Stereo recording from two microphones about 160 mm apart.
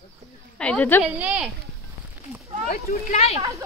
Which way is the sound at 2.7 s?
65° left (ahead or behind).